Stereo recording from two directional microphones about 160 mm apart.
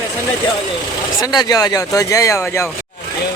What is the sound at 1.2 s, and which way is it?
Speech, 25° left (ahead or behind).